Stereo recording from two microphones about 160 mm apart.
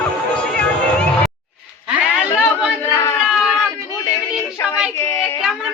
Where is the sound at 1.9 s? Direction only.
5° right (ahead or behind).